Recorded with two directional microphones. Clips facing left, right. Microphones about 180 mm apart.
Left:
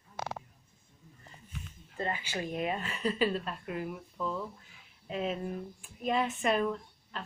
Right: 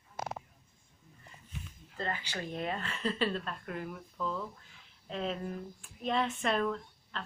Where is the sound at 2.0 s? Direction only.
15° left (ahead or behind).